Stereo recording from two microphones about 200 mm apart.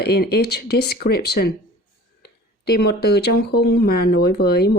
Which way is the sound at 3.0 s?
55° left (ahead or behind).